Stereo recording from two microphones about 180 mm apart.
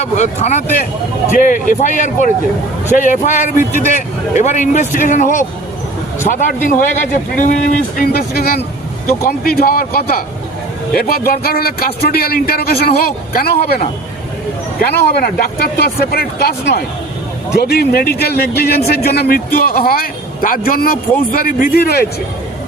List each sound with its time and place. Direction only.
0.0 s a man's voice: 40° left (ahead or behind); by 10.2 s 55° left (ahead or behind)
11.3 s a man's voice: 55° left (ahead or behind)